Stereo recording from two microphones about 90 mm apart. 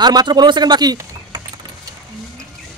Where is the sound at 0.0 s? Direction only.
50° right (ahead or behind).